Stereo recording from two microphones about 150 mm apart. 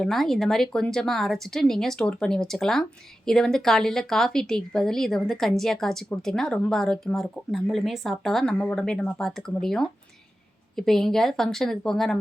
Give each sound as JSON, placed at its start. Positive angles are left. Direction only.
{"t": 0.0, "sound": "speech", "side_deg": 0}